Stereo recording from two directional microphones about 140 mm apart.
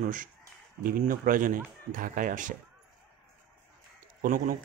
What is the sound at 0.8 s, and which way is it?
Speech, 85° right.